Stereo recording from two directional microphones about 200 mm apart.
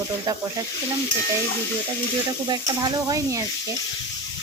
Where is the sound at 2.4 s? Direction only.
20° right (ahead or behind).